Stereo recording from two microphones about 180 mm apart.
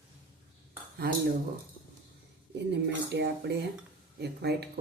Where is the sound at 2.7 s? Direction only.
75° right (ahead or behind).